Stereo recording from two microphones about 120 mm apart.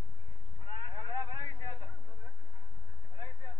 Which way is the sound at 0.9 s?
15° left (ahead or behind).